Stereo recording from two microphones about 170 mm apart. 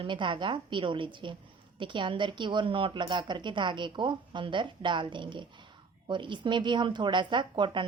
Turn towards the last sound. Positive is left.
turn(degrees=-30)  # may be behind; listen again after turning